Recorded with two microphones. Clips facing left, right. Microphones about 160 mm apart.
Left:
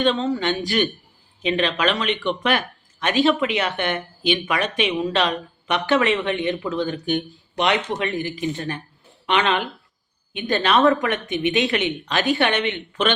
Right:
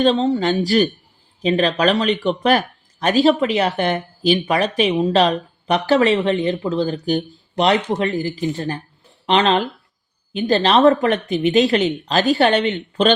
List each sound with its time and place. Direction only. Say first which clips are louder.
0.0 s speech: right 4 dB; 40° right (ahead or behind)